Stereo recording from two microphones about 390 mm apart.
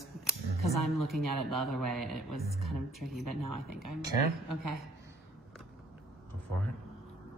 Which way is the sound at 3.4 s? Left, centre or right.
Right.